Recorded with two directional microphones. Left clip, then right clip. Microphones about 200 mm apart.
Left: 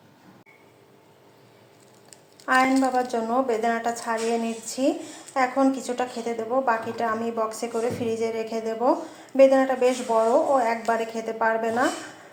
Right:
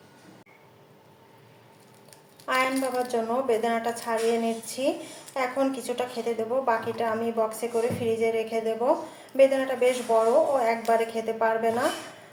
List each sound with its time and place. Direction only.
2.5 s a woman's voice: 20° left (ahead or behind)